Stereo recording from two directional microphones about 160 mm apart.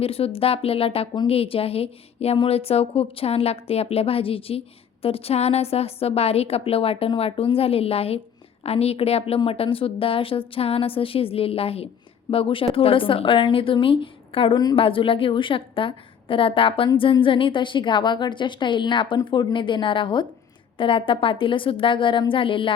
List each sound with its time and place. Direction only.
0.0 s a woman's voice: 35° left (ahead or behind)